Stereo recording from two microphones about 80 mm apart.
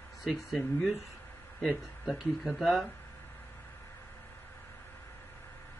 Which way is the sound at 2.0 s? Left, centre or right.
Centre.